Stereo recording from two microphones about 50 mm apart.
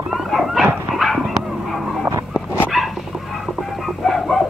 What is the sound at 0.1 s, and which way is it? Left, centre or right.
Dog, centre.